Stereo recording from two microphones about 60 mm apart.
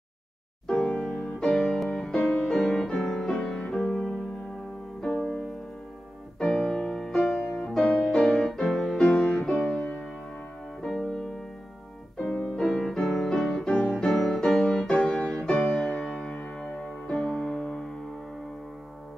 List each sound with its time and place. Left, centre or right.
0.7 s music: centre
7.4 s music: left
7.7 s music: centre
12.5 s music: centre